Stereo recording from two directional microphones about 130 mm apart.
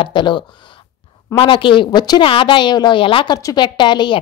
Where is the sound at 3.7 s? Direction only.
35° left (ahead or behind).